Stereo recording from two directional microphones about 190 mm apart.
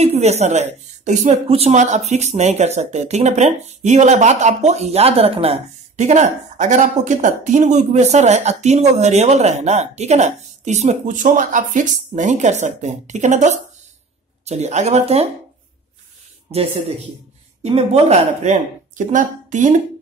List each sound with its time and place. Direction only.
0.0 s a woman's voice: 35° right (ahead or behind)
16.5 s a woman's voice: 30° right (ahead or behind)